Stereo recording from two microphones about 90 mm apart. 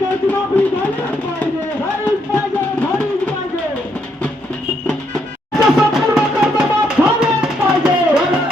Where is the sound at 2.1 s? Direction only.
20° left (ahead or behind).